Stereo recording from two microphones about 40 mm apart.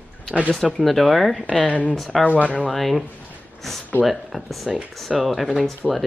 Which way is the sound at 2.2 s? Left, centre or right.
Left.